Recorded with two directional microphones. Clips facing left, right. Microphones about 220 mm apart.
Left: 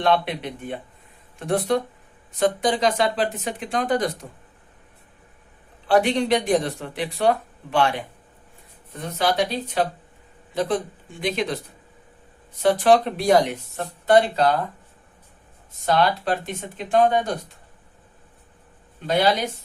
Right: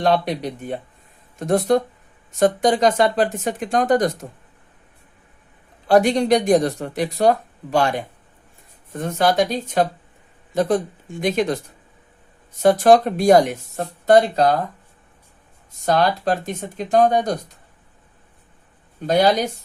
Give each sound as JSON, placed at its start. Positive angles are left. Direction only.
{"t": 0.0, "sound": "speech", "side_deg": -40}
{"t": 5.9, "sound": "speech", "side_deg": -45}
{"t": 15.7, "sound": "speech", "side_deg": -45}
{"t": 19.0, "sound": "speech", "side_deg": -45}